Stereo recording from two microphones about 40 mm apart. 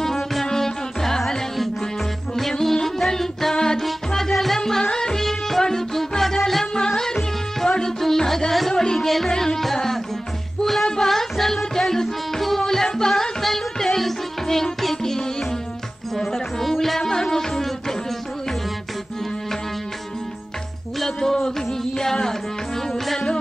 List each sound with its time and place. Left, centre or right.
0.0 s music: centre
9.6 s tabla: centre
10.6 s music: centre
21.0 s a sound: centre
21.9 s music: centre